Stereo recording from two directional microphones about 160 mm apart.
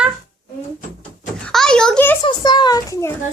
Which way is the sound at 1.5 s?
5° left (ahead or behind).